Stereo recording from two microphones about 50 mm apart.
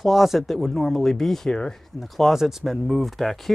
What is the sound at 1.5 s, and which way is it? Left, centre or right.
Speech, centre.